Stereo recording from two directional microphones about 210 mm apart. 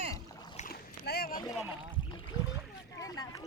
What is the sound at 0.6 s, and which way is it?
Rowboat, 45° left (ahead or behind).